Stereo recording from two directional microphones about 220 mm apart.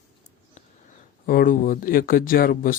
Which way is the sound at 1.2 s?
40° left (ahead or behind).